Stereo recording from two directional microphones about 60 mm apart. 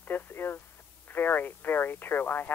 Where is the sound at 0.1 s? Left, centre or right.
Left.